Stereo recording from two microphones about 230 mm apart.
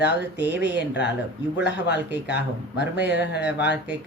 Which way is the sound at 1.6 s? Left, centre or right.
Left.